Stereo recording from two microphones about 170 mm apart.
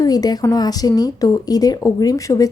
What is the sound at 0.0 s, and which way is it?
Speech, 20° left (ahead or behind).